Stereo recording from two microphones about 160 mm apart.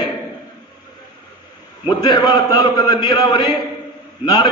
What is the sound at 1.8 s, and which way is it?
A man's voice, 25° left (ahead or behind).